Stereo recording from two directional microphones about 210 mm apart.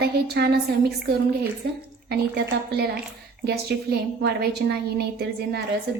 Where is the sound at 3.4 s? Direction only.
50° right (ahead or behind).